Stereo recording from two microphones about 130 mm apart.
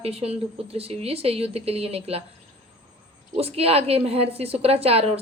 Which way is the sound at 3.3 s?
50° right (ahead or behind).